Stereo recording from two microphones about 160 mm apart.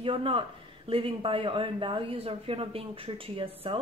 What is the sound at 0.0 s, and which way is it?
Speech, 35° right (ahead or behind).